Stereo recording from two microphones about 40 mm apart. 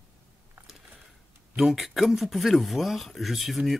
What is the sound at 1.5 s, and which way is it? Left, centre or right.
Speech, centre.